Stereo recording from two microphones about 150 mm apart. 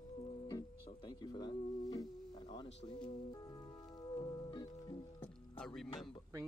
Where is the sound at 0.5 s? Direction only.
25° left (ahead or behind).